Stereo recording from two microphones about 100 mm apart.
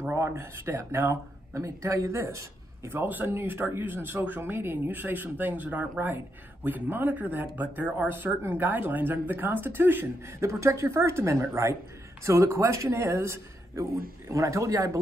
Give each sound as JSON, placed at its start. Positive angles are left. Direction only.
{"t": 0.0, "sound": "speech", "side_deg": -25}
{"t": 2.9, "sound": "speech", "side_deg": -20}